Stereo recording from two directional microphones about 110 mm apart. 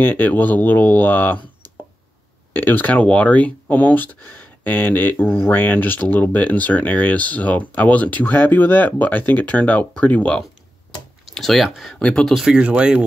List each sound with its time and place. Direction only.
0.0 s speech: 15° left (ahead or behind)
11.3 s speech: centre (ahead or behind)